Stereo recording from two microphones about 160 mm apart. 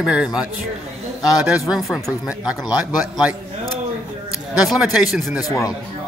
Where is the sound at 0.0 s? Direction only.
5° right (ahead or behind).